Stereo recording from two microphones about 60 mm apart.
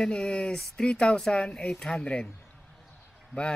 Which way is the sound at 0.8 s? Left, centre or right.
Centre.